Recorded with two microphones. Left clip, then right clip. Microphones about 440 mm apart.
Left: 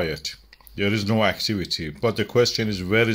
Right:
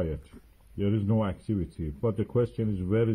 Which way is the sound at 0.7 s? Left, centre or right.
Left.